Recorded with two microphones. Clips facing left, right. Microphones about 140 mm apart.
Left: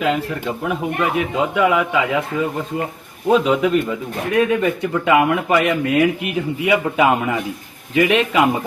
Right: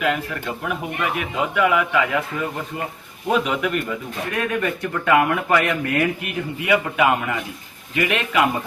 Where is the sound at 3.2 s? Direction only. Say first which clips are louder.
Left 6 dB; 25° left (ahead or behind).